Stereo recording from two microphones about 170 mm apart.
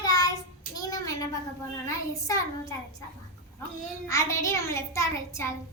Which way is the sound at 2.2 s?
20° left (ahead or behind).